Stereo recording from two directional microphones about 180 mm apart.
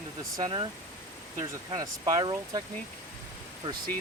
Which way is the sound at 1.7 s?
20° right (ahead or behind).